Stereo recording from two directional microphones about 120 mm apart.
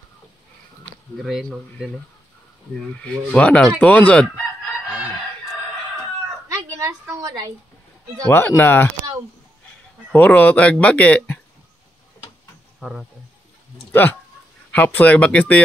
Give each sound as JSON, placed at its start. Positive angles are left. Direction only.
{"t": 1.1, "sound": "speech", "side_deg": 0}
{"t": 2.9, "sound": "speech", "side_deg": 10}
{"t": 6.5, "sound": "a sound", "side_deg": -25}
{"t": 8.3, "sound": "speech", "side_deg": 20}
{"t": 10.1, "sound": "speech", "side_deg": 10}
{"t": 14.7, "sound": "speech", "side_deg": 10}